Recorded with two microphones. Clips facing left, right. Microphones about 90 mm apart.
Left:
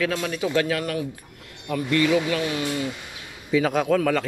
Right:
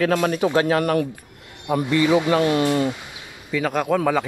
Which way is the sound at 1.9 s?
25° right (ahead or behind).